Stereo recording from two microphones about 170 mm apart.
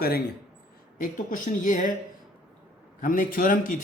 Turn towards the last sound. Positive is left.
turn(degrees=50)  # may be behind; listen again after turning